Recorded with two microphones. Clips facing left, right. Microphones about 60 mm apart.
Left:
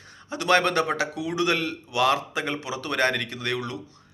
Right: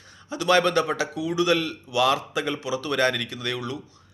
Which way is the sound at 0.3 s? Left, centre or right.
Left.